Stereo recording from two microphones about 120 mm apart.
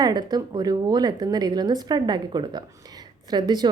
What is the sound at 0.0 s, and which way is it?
A woman's voice, 35° right (ahead or behind).